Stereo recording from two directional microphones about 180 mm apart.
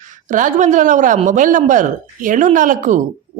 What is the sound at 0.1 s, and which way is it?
A woman's voice, 45° right (ahead or behind).